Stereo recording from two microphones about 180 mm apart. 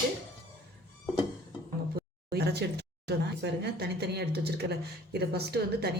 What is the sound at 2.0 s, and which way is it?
A woman's voice, 65° right (ahead or behind).